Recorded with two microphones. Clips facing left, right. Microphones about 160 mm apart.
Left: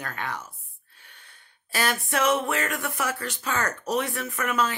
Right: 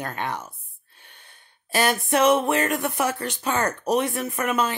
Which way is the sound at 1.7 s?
20° right (ahead or behind).